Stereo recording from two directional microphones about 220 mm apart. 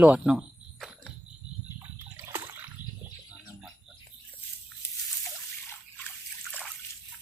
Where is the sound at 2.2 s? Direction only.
10° right (ahead or behind).